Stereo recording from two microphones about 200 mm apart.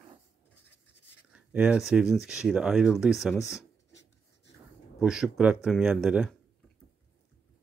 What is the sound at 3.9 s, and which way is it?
Filing, 65° left (ahead or behind).